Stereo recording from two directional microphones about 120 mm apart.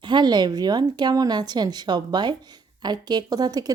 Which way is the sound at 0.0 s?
40° right (ahead or behind).